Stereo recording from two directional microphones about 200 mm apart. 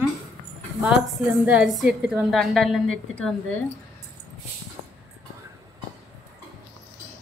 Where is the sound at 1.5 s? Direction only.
5° right (ahead or behind).